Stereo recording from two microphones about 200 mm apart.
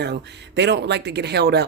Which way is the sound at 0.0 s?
60° right (ahead or behind).